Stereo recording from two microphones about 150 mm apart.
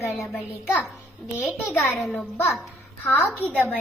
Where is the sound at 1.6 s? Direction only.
15° left (ahead or behind).